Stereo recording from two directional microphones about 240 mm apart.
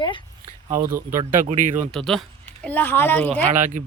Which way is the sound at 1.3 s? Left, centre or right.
Right.